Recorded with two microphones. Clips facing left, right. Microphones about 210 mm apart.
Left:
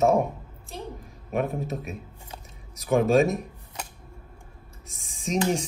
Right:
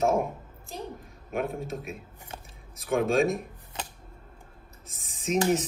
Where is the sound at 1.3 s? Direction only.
Centre (ahead or behind).